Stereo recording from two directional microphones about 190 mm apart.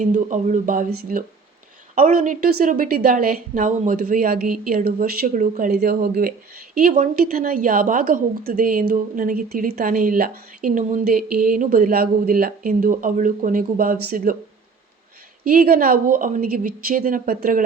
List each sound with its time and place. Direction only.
0.0 s a woman's voice: 40° right (ahead or behind)
15.4 s a woman's voice: 50° right (ahead or behind)